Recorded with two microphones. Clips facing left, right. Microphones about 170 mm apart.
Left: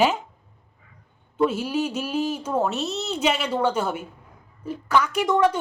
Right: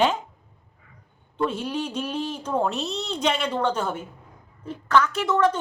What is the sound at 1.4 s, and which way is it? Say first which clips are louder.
A man's voice: left 4 dB; 5° left (ahead or behind).